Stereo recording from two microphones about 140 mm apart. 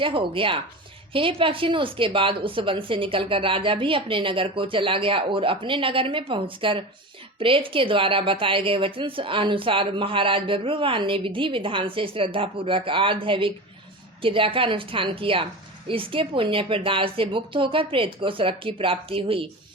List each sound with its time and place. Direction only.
0.0 s a woman's voice: 40° right (ahead or behind)